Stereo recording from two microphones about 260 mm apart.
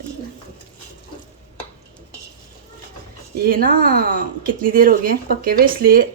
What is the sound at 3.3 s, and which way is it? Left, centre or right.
Speech, right.